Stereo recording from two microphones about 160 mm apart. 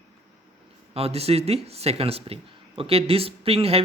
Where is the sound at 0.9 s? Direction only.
40° right (ahead or behind).